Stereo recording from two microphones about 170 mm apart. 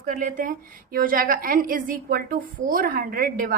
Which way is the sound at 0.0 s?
55° right (ahead or behind).